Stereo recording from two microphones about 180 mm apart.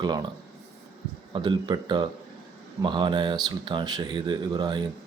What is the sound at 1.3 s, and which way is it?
Speech, 25° right (ahead or behind).